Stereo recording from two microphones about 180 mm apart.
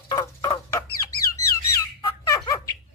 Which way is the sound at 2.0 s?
20° left (ahead or behind).